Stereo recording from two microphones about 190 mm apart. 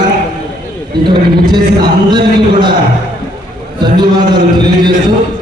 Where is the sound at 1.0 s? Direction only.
25° right (ahead or behind).